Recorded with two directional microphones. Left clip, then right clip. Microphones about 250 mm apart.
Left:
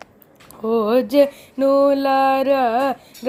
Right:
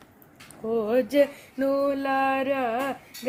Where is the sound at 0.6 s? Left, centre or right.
Left.